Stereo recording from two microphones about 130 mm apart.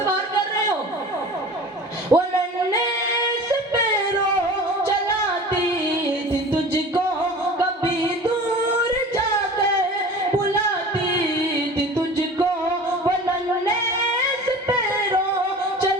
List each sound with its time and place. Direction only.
2.1 s a man's voice: 20° right (ahead or behind)